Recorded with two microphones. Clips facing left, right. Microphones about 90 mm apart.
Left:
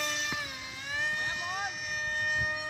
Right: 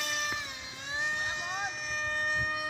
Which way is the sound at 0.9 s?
20° right (ahead or behind).